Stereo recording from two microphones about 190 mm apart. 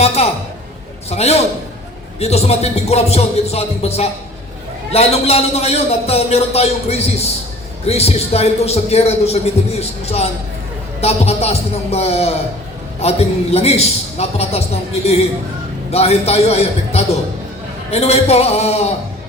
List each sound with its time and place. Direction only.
0.2 s a sound: 30° left (ahead or behind)
1.1 s speech: 35° left (ahead or behind)
15.9 s speech: 35° left (ahead or behind)